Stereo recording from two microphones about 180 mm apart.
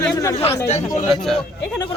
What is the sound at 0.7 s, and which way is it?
Speech, 40° left (ahead or behind).